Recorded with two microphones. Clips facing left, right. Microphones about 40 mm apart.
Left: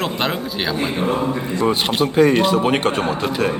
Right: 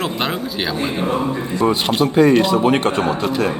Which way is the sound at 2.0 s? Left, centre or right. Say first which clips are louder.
Right 2 dB; left.